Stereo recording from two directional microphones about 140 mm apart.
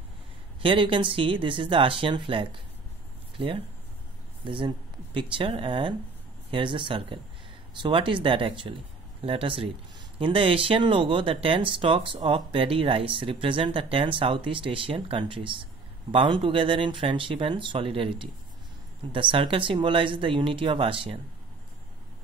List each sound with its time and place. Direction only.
0.6 s speech: 40° right (ahead or behind)